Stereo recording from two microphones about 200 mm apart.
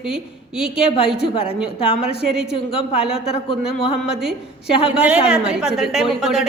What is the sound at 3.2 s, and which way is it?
Speech, 30° left (ahead or behind).